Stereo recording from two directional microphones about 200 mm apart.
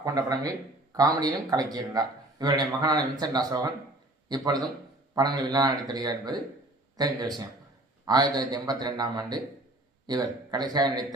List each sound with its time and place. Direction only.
0.0 s speech: 20° right (ahead or behind)